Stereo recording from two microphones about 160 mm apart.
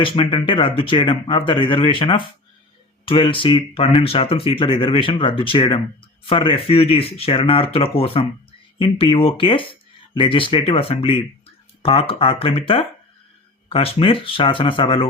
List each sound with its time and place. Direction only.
0.0 s speech: 35° left (ahead or behind)